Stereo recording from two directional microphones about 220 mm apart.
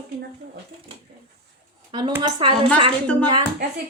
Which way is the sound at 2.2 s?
25° right (ahead or behind).